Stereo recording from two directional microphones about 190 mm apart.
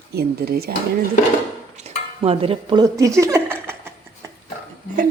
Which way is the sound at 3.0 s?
15° right (ahead or behind).